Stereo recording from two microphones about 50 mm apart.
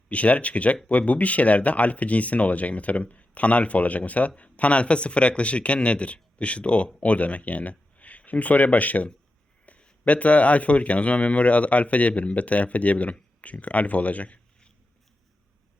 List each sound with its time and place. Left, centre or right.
0.1 s speech: left